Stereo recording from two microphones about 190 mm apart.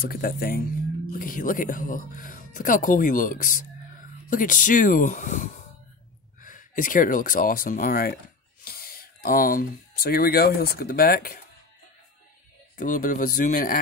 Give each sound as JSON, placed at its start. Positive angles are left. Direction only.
{"t": 0.0, "sound": "speech", "side_deg": 55}
{"t": 12.7, "sound": "speech", "side_deg": 45}